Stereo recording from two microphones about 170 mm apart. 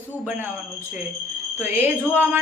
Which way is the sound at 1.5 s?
15° right (ahead or behind).